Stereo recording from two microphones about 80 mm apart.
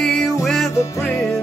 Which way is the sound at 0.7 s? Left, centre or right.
Left.